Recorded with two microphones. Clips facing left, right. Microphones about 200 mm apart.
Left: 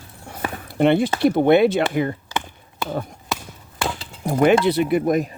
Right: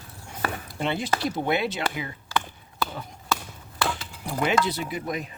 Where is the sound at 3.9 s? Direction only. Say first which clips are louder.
Left 8 dB; 45° left (ahead or behind).